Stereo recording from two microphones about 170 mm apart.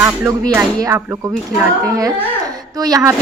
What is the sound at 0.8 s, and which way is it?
A woman's voice, 15° right (ahead or behind).